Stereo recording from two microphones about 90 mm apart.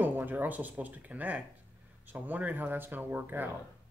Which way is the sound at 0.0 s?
20° right (ahead or behind).